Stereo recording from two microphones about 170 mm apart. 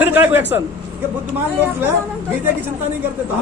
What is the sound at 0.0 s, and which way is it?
Speech, 10° right (ahead or behind).